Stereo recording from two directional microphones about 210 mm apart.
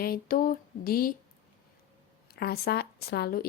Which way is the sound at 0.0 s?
45° left (ahead or behind).